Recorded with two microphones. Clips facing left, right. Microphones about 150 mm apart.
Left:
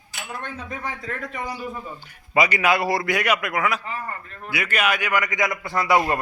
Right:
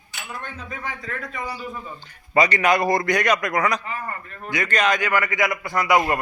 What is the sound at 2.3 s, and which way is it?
A man's voice, 10° left (ahead or behind).